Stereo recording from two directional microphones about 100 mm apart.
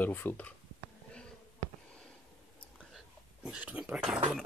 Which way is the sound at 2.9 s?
5° right (ahead or behind).